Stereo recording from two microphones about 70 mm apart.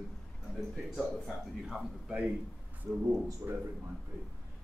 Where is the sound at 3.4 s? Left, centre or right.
Right.